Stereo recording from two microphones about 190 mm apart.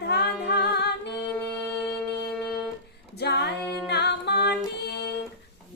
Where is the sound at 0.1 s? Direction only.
60° left (ahead or behind).